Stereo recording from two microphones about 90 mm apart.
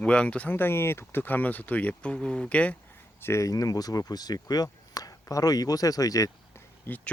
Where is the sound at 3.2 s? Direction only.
30° left (ahead or behind).